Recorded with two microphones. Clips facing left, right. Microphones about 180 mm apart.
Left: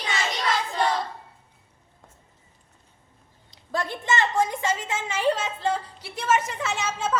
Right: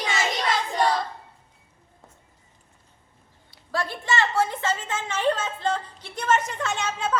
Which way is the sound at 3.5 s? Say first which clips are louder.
Even; 20° left (ahead or behind).